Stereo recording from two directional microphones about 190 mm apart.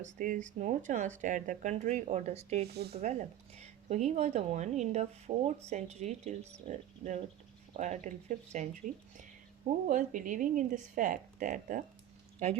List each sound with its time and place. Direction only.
0.0 s speech: 40° right (ahead or behind)